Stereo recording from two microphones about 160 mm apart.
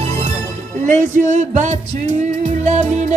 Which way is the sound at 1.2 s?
50° right (ahead or behind).